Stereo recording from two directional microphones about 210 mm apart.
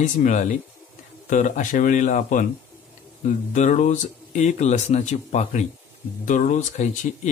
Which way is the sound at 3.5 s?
35° left (ahead or behind).